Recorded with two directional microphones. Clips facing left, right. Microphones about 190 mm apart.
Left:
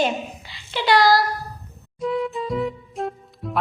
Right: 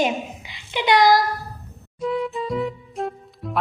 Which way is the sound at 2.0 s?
Centre (ahead or behind).